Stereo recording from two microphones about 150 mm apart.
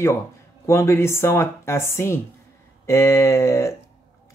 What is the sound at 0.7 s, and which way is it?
Speech, 15° left (ahead or behind).